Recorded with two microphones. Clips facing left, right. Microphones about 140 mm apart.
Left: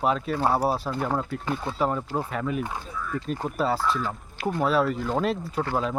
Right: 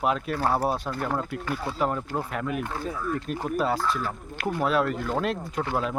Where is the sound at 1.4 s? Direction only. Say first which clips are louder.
Left 1 dB; 20° left (ahead or behind).